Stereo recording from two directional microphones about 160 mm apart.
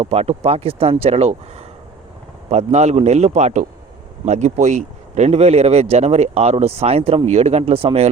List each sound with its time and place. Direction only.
0.0 s a man's voice: 40° right (ahead or behind)